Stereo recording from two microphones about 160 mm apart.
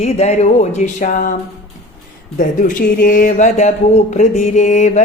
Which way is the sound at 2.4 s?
55° left (ahead or behind).